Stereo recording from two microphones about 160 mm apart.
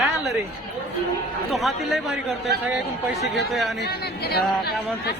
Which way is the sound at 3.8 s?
90° left.